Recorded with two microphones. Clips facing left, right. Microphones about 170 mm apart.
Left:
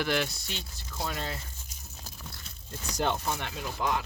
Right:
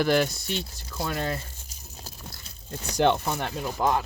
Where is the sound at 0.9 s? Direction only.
60° right (ahead or behind).